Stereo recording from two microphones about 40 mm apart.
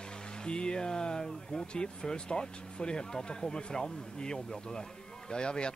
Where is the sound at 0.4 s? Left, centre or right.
Left.